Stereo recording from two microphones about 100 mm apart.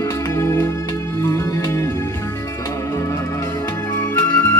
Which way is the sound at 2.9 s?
30° left (ahead or behind).